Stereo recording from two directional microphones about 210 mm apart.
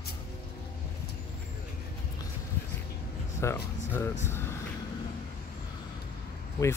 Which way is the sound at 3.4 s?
10° left (ahead or behind).